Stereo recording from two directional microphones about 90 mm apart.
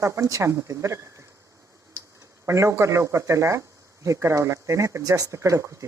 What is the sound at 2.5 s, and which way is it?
Speech, 35° right (ahead or behind).